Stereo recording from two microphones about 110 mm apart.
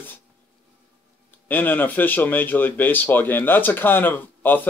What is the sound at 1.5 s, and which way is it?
Speech, 15° left (ahead or behind).